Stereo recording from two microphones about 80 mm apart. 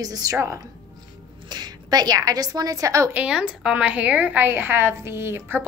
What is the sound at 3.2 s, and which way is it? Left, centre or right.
A woman's voice, centre.